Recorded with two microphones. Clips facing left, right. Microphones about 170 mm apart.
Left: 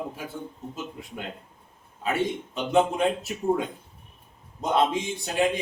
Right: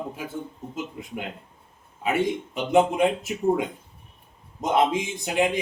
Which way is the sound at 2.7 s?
15° right (ahead or behind).